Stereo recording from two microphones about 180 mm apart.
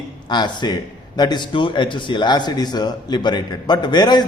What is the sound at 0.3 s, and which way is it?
A man's voice, 25° left (ahead or behind).